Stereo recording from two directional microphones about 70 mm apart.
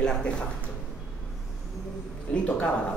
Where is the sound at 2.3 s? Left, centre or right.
Centre.